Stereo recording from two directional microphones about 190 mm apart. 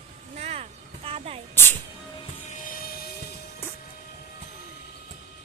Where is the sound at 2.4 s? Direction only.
40° left (ahead or behind).